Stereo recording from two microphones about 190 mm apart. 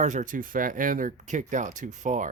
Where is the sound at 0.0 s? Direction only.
40° right (ahead or behind).